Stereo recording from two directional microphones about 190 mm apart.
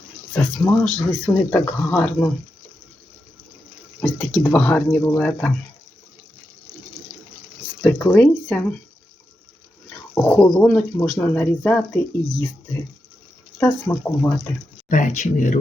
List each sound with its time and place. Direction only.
0.3 s speech: 10° left (ahead or behind)
4.0 s speech: 5° left (ahead or behind)
7.8 s speech: 10° left (ahead or behind)
10.2 s speech: 5° left (ahead or behind)
13.6 s speech: 10° left (ahead or behind)
14.8 s speech: 40° left (ahead or behind)